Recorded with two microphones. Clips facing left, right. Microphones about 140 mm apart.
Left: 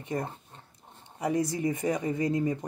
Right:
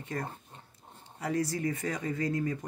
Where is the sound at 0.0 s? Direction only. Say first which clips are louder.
Left 4 dB; 20° left (ahead or behind).